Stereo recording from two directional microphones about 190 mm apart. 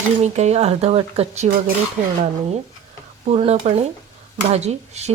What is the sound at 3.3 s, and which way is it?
Speech, 30° right (ahead or behind).